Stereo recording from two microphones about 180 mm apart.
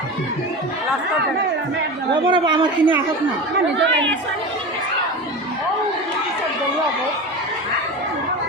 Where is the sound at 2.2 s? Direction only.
25° right (ahead or behind).